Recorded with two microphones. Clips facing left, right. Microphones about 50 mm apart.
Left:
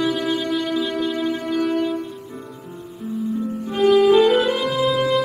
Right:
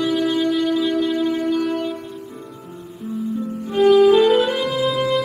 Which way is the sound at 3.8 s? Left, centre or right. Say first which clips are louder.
Right 2 dB; centre.